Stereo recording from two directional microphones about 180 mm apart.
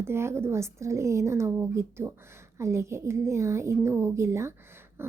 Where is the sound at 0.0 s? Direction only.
15° right (ahead or behind).